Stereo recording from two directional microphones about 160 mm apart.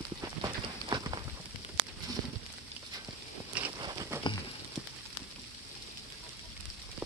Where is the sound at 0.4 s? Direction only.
25° right (ahead or behind).